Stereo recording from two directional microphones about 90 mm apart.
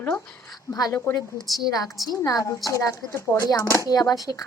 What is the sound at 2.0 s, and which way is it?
A woman's voice, 40° left (ahead or behind).